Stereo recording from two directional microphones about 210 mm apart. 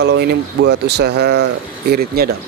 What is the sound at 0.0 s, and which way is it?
Speech, 50° right (ahead or behind).